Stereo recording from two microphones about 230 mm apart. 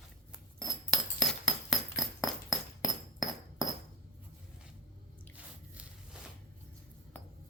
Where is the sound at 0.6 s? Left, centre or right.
Centre.